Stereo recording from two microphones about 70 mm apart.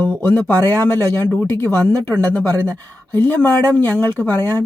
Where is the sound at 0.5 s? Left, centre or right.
Right.